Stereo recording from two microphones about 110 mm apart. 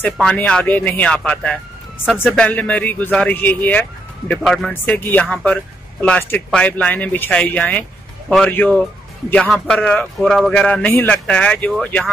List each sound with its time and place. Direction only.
0.0 s a man's voice: 5° left (ahead or behind)
4.4 s speech: centre (ahead or behind)
4.9 s a man's voice: 15° left (ahead or behind)